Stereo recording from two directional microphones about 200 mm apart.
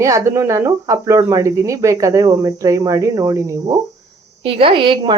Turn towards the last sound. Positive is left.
turn(degrees=-25)  # may be behind; listen again after turning